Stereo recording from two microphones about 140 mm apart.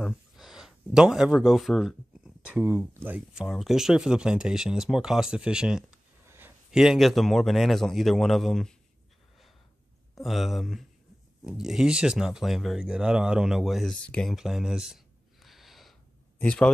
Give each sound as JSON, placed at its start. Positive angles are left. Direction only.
{"t": 0.0, "sound": "speech", "side_deg": -5}
{"t": 6.2, "sound": "a sound", "side_deg": -15}
{"t": 6.7, "sound": "speech", "side_deg": -5}
{"t": 10.2, "sound": "speech", "side_deg": 0}
{"t": 15.4, "sound": "a sound", "side_deg": 0}
{"t": 16.3, "sound": "speech", "side_deg": 5}